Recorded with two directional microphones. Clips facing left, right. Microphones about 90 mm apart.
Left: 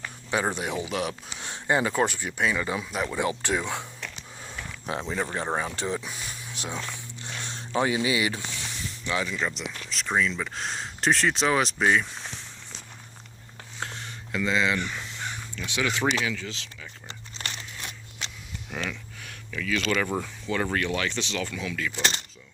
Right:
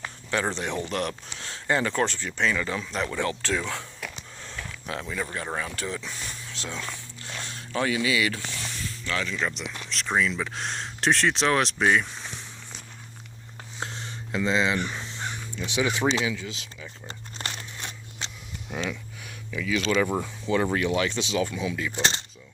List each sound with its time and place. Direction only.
0.3 s speech: 15° left (ahead or behind)
1.4 s speech: 20° left (ahead or behind)
4.4 s mechanisms: 10° left (ahead or behind)
4.9 s speech: 25° left (ahead or behind)
6.1 s speech: 10° left (ahead or behind)
13.7 s a sound: 25° right (ahead or behind)
15.5 s speech: 20° right (ahead or behind)
17.1 s crumpling: 40° right (ahead or behind)
17.7 s scissors: 25° right (ahead or behind)
18.9 s speech: 10° right (ahead or behind)